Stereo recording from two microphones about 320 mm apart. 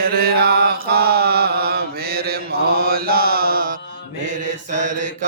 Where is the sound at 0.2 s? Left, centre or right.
Right.